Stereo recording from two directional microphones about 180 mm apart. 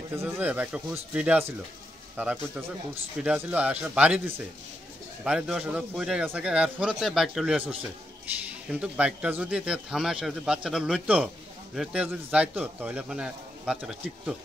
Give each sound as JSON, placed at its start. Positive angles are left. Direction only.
{"t": 0.1, "sound": "speech", "side_deg": -10}
{"t": 5.2, "sound": "speech", "side_deg": -5}